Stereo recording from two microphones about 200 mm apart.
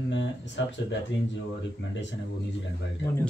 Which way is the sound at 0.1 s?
65° left (ahead or behind).